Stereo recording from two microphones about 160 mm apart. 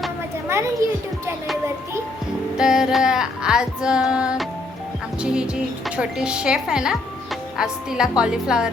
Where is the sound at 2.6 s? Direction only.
5° right (ahead or behind).